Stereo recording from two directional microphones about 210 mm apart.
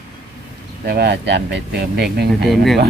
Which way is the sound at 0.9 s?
50° right (ahead or behind).